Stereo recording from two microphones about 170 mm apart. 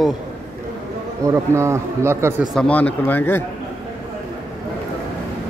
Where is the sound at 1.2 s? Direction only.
15° right (ahead or behind).